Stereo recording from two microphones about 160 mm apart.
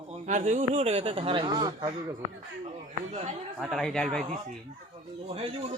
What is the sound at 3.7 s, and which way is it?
Speech, 5° left (ahead or behind).